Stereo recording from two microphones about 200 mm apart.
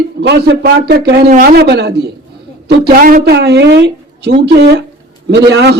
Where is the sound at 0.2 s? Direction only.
55° right (ahead or behind).